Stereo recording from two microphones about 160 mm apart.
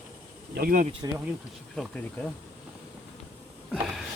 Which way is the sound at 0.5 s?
65° right (ahead or behind).